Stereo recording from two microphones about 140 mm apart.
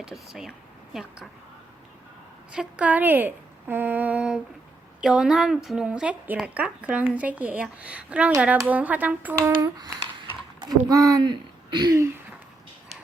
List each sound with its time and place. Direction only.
0.0 s speech: 5° right (ahead or behind)
2.5 s a woman's voice: 10° right (ahead or behind)
9.6 s a sound: 30° right (ahead or behind)
10.6 s speech: 25° right (ahead or behind)